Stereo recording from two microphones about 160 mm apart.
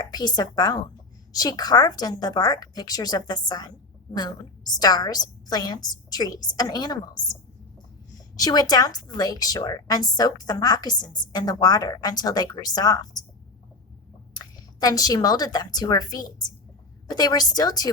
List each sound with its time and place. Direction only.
0.0 s a woman's voice: 25° left (ahead or behind)
8.4 s a woman's voice: 25° left (ahead or behind)
14.3 s a woman's voice: 25° left (ahead or behind)